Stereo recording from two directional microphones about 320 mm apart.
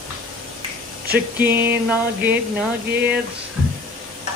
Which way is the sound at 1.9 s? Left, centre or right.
Centre.